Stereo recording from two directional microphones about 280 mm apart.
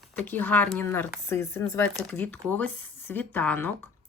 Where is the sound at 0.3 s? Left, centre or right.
Centre.